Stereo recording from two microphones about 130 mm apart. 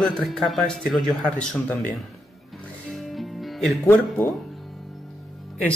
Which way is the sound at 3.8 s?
15° left (ahead or behind).